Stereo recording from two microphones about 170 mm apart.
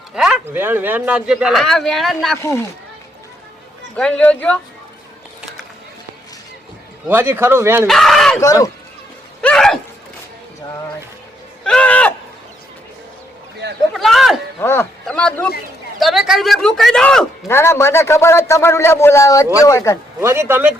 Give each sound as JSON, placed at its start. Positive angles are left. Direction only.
{"t": 0.1, "sound": "speech", "side_deg": -5}
{"t": 3.9, "sound": "a man's voice", "side_deg": 5}
{"t": 7.1, "sound": "speech", "side_deg": -15}
{"t": 7.9, "sound": "speech", "side_deg": 0}
{"t": 8.4, "sound": "speech", "side_deg": 20}
{"t": 9.4, "sound": "a sound", "side_deg": 5}
{"t": 11.6, "sound": "a sound", "side_deg": 5}
{"t": 13.9, "sound": "a sound", "side_deg": 0}
{"t": 14.6, "sound": "a man's voice", "side_deg": 15}
{"t": 17.5, "sound": "a man's voice", "side_deg": 15}
{"t": 20.2, "sound": "speech", "side_deg": -15}